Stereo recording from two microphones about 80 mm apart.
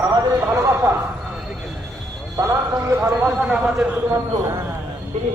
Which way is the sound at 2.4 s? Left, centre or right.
Right.